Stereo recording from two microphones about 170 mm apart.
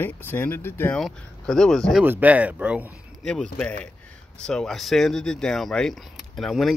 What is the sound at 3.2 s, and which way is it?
Speech, 5° left (ahead or behind).